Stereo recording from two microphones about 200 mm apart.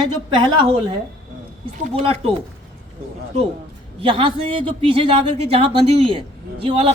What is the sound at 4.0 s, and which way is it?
A man's voice, 25° right (ahead or behind).